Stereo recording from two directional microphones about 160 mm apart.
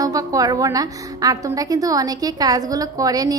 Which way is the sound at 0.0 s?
20° right (ahead or behind).